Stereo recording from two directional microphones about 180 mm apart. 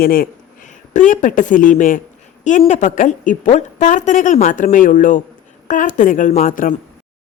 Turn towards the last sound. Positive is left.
turn(degrees=50)  # may be behind; listen again after turning